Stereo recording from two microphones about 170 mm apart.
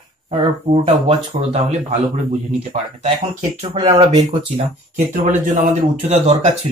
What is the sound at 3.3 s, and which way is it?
Speech, 40° right (ahead or behind).